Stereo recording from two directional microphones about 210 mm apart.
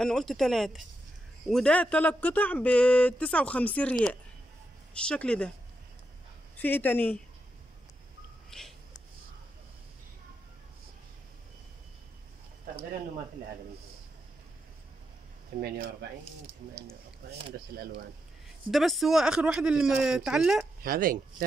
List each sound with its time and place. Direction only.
0.0 s speech: centre (ahead or behind)
4.9 s speech: 5° left (ahead or behind)
6.6 s speech: 10° left (ahead or behind)
8.5 s a sound: centre (ahead or behind)
15.6 s speech: 50° right (ahead or behind)
17.5 s speech: 55° right (ahead or behind)
18.7 s speech: centre (ahead or behind)
20.8 s speech: 40° right (ahead or behind)